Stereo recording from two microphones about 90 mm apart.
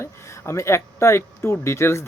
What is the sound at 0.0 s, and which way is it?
Speech, 30° left (ahead or behind).